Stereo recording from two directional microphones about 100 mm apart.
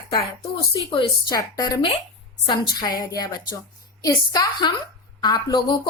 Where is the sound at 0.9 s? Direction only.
40° left (ahead or behind).